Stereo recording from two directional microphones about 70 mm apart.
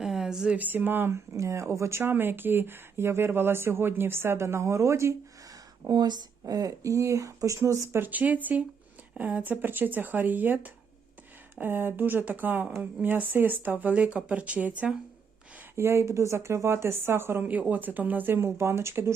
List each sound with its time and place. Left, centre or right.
0.0 s a sound: centre
0.5 s speech: right
1.1 s speech: right
5.9 s speech: right
8.0 s speech: right
15.7 s speech: right
17.4 s speech: right
18.3 s speech: right